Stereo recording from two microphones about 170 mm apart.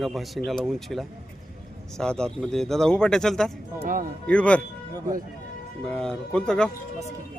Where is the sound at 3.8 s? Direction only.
50° right (ahead or behind).